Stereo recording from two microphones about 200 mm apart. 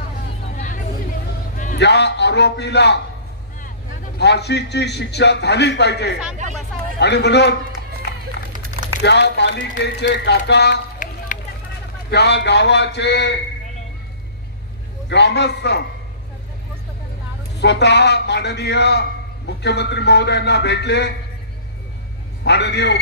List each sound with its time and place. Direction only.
1.8 s a man's voice: 60° left (ahead or behind)
4.2 s a man's voice: 60° left (ahead or behind)
9.0 s a man's voice: 60° left (ahead or behind)
11.0 s run: 40° left (ahead or behind)
12.1 s a man's voice: 55° left (ahead or behind)
15.0 s a man's voice: 60° left (ahead or behind)
17.6 s a man's voice: 60° left (ahead or behind)
22.4 s a man's voice: 55° left (ahead or behind)